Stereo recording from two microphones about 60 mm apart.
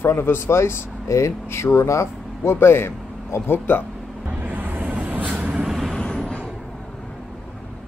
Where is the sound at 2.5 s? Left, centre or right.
Left.